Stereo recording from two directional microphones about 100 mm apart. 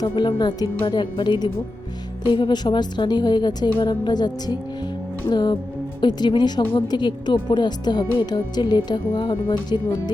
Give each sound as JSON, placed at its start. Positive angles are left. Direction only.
{"t": 0.0, "sound": "speech", "side_deg": 50}